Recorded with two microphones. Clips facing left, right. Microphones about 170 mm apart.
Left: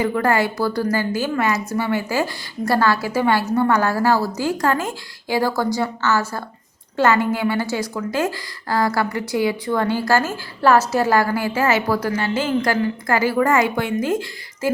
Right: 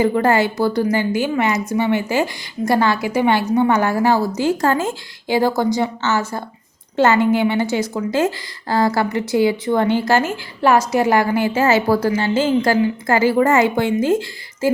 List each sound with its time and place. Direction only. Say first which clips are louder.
0.0 s a woman's voice: right 3 dB; 25° right (ahead or behind)